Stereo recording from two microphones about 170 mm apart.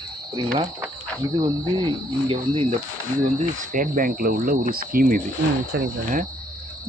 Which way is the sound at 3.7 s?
55° right (ahead or behind).